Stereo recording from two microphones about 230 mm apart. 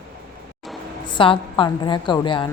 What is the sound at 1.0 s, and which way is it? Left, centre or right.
A woman's voice, left.